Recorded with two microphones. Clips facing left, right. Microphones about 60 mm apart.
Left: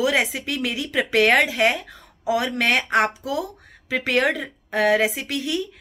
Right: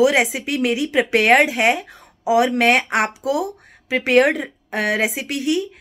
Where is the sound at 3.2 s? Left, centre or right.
Right.